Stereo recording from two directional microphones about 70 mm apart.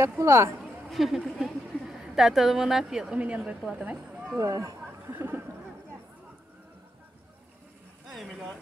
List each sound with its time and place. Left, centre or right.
0.2 s speech: right
0.6 s a woman's voice: centre
4.4 s a sound: right
5.1 s speech: right
8.1 s speech: centre